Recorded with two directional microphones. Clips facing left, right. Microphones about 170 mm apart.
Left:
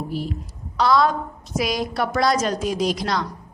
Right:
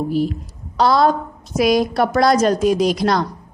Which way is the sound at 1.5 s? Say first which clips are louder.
Right 8 dB; 45° right (ahead or behind).